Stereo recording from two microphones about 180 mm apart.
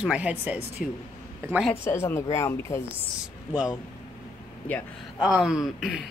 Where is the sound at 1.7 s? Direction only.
15° left (ahead or behind).